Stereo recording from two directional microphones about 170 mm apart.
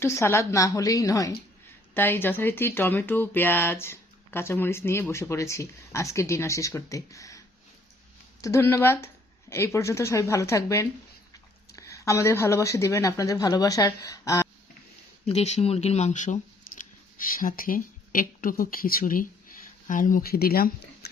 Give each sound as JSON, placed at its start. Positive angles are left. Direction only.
{"t": 0.0, "sound": "speech", "side_deg": 15}
{"t": 15.3, "sound": "speech", "side_deg": 40}